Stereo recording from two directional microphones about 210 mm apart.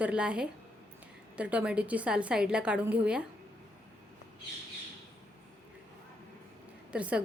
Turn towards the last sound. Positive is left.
turn(degrees=-5)  # may be behind; listen again after turning